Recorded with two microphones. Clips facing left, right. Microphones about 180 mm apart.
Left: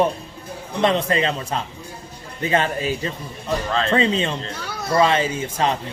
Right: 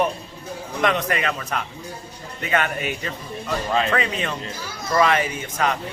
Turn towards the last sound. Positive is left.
turn(degrees=30)  # may be behind; listen again after turning